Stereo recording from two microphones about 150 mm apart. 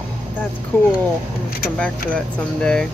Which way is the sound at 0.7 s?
10° left (ahead or behind).